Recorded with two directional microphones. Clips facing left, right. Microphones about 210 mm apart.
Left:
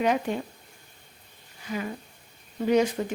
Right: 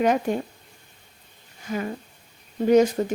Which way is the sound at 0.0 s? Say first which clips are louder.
Right 4 dB; 45° right (ahead or behind).